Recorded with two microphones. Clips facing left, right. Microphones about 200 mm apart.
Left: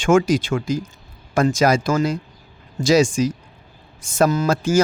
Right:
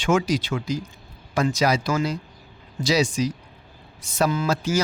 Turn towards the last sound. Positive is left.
turn(degrees=50)  # may be behind; listen again after turning